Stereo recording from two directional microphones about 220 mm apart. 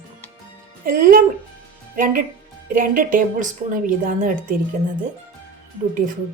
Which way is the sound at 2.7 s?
40° right (ahead or behind).